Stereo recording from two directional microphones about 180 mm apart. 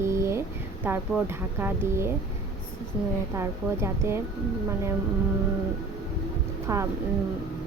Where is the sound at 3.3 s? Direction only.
15° right (ahead or behind).